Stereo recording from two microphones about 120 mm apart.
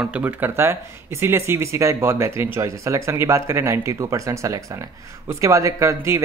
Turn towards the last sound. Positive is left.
turn(degrees=-25)  # may be behind; listen again after turning